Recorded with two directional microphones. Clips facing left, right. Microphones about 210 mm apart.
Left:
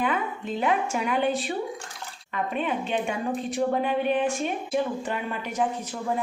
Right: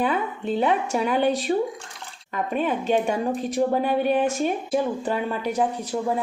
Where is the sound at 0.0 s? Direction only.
35° right (ahead or behind).